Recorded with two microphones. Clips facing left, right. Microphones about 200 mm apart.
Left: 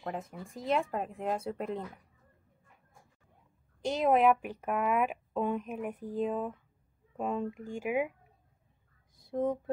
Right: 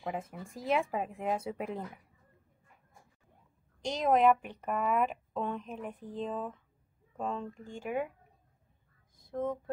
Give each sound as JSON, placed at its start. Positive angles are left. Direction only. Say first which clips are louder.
{"t": 0.0, "sound": "speech", "louder": "even", "side_deg": 0}
{"t": 3.8, "sound": "a woman's voice", "louder": "left 1 dB", "side_deg": 5}
{"t": 9.3, "sound": "a woman's voice", "louder": "left 3 dB", "side_deg": 15}